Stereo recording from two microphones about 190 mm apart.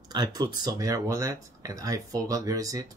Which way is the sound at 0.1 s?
20° right (ahead or behind).